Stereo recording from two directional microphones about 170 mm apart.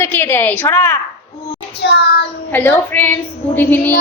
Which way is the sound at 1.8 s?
85° left.